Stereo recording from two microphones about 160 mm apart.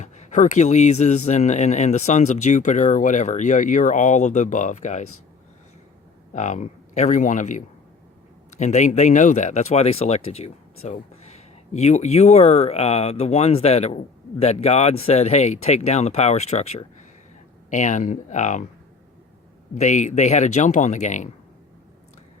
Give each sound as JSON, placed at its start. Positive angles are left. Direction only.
{"t": 0.0, "sound": "speech", "side_deg": 50}
{"t": 6.3, "sound": "speech", "side_deg": 50}
{"t": 19.7, "sound": "speech", "side_deg": 50}